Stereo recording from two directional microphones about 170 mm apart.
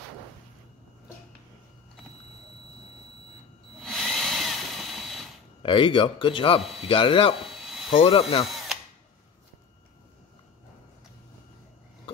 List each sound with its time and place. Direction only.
3.8 s wood: centre (ahead or behind)
5.6 s a man's voice: 30° left (ahead or behind)